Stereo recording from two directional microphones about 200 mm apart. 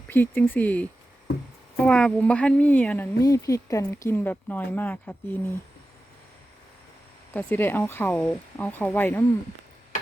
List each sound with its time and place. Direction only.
0.1 s speech: 10° left (ahead or behind)
7.3 s speech: 10° left (ahead or behind)